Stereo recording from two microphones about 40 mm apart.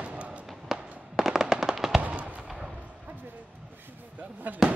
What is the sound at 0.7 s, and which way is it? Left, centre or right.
Fireworks, centre.